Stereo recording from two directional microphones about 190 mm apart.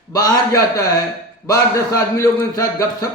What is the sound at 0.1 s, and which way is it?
A man's voice, 20° left (ahead or behind).